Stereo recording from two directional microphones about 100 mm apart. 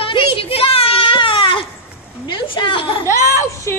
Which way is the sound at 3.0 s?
30° right (ahead or behind).